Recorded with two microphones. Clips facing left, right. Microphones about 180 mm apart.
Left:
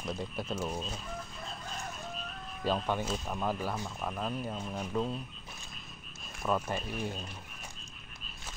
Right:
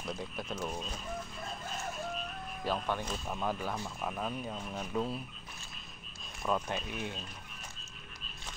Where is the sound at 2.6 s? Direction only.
15° left (ahead or behind).